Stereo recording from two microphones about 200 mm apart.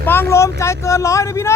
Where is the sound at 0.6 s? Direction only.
15° left (ahead or behind).